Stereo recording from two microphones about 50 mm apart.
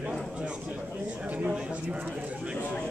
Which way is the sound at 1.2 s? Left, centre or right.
Right.